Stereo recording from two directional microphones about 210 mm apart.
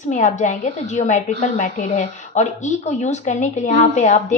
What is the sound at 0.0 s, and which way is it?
A woman's voice, 35° left (ahead or behind).